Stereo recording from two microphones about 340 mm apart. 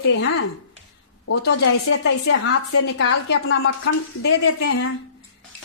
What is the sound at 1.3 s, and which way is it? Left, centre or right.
A woman's voice, left.